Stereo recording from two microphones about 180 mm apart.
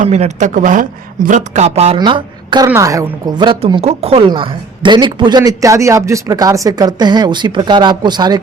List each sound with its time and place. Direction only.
0.0 s speech: 40° right (ahead or behind); by 8.4 s 25° right (ahead or behind)